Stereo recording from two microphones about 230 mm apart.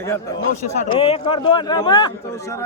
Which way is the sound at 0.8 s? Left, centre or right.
Left.